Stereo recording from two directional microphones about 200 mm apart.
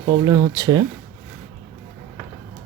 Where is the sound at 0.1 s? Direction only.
20° right (ahead or behind).